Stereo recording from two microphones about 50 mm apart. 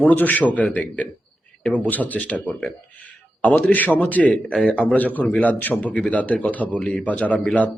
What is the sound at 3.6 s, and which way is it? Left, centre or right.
Speech, left.